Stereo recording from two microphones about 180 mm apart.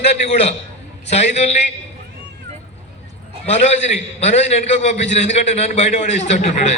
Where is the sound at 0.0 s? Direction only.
35° left (ahead or behind).